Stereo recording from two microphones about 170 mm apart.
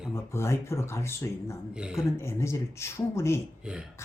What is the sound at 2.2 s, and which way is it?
Speech, 15° left (ahead or behind).